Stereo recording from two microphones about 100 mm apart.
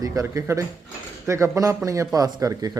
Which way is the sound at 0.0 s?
30° right (ahead or behind).